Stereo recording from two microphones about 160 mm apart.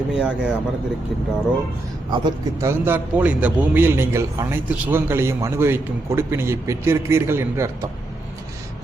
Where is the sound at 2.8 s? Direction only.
10° right (ahead or behind).